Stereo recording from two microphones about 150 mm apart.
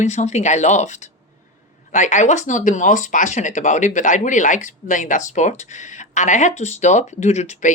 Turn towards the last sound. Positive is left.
turn(degrees=55)  # may be behind; listen again after turning